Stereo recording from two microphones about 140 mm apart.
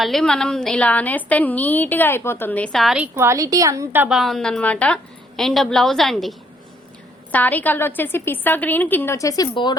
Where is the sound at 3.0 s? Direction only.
20° right (ahead or behind).